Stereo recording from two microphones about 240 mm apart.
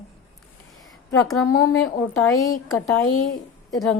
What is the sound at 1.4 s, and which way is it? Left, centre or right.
Speech, left.